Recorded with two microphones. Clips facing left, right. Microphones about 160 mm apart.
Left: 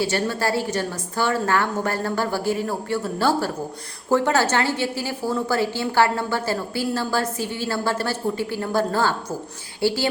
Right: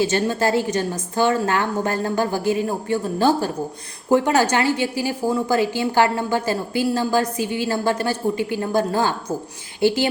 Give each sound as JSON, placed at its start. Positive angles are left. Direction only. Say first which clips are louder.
{"t": 0.0, "sound": "a woman's voice", "louder": "right 3 dB", "side_deg": -20}